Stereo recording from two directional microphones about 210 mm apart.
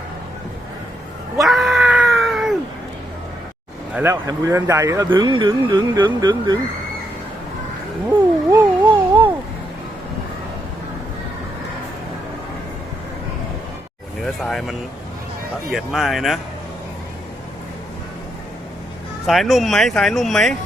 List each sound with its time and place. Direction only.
1.4 s cat: centre (ahead or behind)
3.9 s speech: 15° right (ahead or behind)
8.4 s a sound: 20° right (ahead or behind)
14.3 s vehicle: centre (ahead or behind)
15.7 s speech: centre (ahead or behind)
19.2 s speech: centre (ahead or behind)